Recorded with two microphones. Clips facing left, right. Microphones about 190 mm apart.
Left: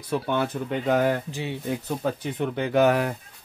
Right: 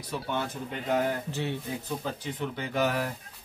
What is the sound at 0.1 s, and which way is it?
Speech, 65° left (ahead or behind).